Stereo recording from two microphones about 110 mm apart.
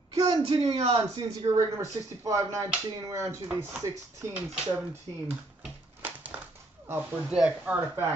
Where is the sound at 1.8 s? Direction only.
30° right (ahead or behind).